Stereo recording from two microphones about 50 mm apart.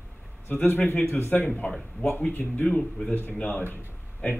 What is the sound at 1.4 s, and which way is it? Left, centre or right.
Speech, left.